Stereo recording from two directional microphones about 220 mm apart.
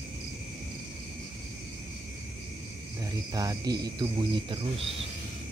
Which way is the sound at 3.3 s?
15° right (ahead or behind).